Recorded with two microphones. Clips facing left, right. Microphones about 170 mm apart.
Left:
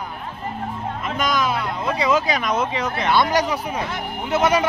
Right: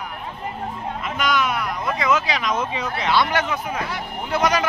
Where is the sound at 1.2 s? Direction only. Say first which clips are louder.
Even; 40° left (ahead or behind).